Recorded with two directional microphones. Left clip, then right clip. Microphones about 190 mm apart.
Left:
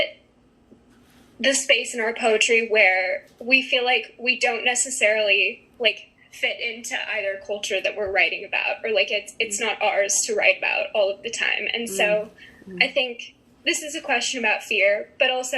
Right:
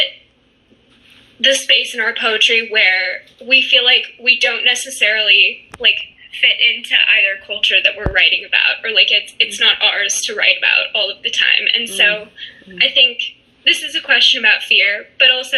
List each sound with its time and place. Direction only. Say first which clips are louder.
1.4 s a woman's voice: right 7 dB; 15° left (ahead or behind)